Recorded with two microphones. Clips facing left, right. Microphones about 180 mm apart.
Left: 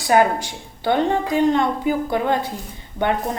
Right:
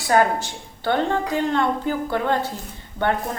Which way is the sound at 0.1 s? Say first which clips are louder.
Left 2 dB; 15° left (ahead or behind).